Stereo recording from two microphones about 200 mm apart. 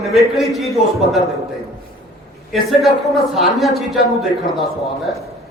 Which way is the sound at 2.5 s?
Centre (ahead or behind).